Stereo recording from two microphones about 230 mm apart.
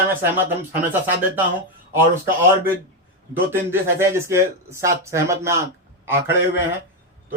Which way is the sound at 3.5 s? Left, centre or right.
Centre.